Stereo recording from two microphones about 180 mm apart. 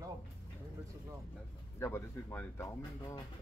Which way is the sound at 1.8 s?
15° left (ahead or behind).